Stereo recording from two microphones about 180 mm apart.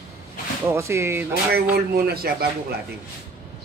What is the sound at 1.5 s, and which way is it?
Speech, 60° right (ahead or behind).